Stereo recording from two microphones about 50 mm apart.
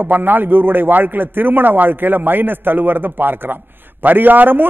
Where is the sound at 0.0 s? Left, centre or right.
Right.